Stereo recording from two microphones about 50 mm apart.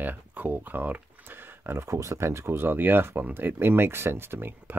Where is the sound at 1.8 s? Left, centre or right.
Right.